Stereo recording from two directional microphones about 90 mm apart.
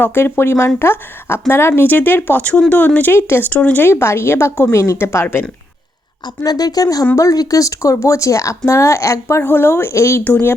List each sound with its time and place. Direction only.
0.0 s speech: 25° left (ahead or behind)
6.2 s speech: 45° left (ahead or behind)
9.2 s speech: 25° left (ahead or behind)
10.2 s speech: 20° left (ahead or behind)